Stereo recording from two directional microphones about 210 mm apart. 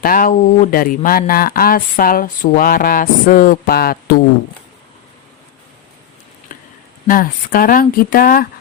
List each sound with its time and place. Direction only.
0.0 s speech: 45° left (ahead or behind)
6.5 s a sound: 35° left (ahead or behind)
7.1 s speech: 40° left (ahead or behind)